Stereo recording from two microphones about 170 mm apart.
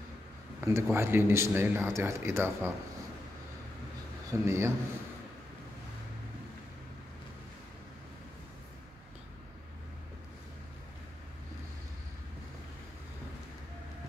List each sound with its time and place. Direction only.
0.7 s speech: 15° right (ahead or behind)
4.3 s speech: 15° right (ahead or behind)